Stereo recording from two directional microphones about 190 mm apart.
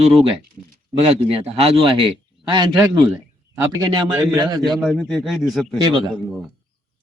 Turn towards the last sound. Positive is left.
turn(degrees=-25)  # may be behind; listen again after turning